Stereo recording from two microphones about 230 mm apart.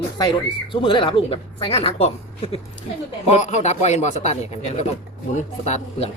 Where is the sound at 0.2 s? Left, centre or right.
Centre.